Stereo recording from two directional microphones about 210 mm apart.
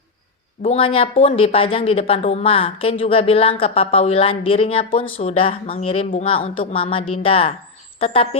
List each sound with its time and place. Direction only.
0.6 s speech: 25° left (ahead or behind)